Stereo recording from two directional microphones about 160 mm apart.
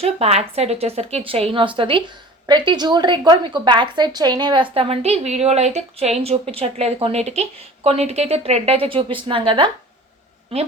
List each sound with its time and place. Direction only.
0.0 s a woman's voice: 40° right (ahead or behind)